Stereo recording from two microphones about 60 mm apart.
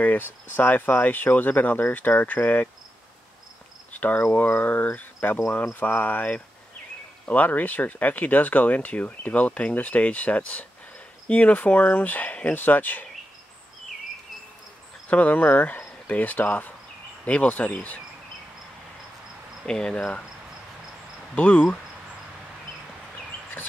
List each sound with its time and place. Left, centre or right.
0.0 s speech: left
4.0 s speech: left
15.0 s speech: left
19.6 s speech: centre
21.4 s speech: left